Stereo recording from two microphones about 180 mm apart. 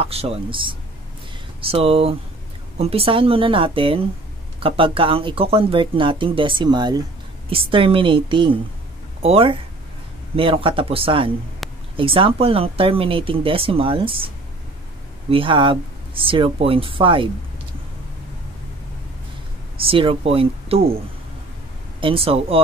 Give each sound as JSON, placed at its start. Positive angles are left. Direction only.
{"t": 0.0, "sound": "speech", "side_deg": -35}
{"t": 11.6, "sound": "a sound", "side_deg": 0}
{"t": 12.0, "sound": "speech", "side_deg": -30}
{"t": 15.2, "sound": "speech", "side_deg": -30}
{"t": 19.8, "sound": "speech", "side_deg": -30}
{"t": 22.0, "sound": "speech", "side_deg": -30}